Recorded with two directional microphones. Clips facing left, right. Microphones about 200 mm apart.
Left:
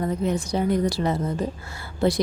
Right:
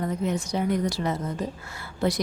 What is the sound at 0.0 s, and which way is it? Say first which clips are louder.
A woman's voice: left 3 dB; 30° left (ahead or behind).